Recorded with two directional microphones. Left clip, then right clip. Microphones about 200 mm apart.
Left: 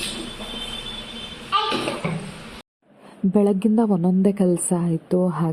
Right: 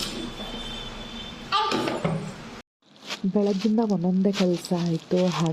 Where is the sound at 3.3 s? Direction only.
25° left (ahead or behind).